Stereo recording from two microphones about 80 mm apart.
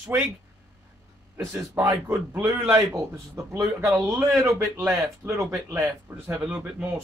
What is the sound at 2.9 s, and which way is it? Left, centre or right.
Speech, right.